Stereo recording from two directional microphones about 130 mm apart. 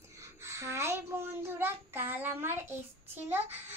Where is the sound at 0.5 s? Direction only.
20° right (ahead or behind).